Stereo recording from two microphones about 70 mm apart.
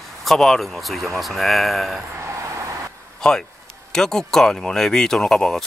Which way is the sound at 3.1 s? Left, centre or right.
Centre.